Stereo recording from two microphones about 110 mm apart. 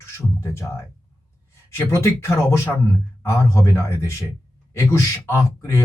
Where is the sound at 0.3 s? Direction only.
25° left (ahead or behind).